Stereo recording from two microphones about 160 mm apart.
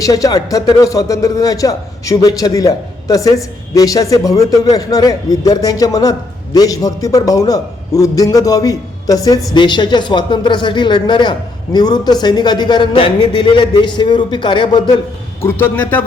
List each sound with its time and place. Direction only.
0.0 s speech: 20° left (ahead or behind)
15.4 s a man's voice: 15° left (ahead or behind)